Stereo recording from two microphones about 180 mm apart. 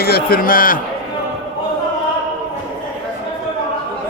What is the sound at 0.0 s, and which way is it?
Speech, 55° left (ahead or behind).